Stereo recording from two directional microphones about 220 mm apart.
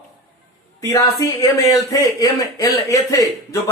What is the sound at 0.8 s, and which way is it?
A man's voice, 15° left (ahead or behind).